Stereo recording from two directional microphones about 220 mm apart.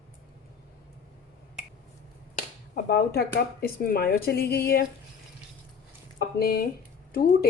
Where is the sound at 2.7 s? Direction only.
45° left (ahead or behind).